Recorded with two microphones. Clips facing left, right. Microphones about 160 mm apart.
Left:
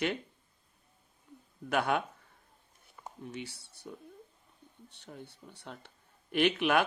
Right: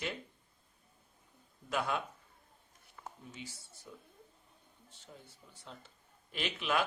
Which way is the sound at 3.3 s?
65° left (ahead or behind).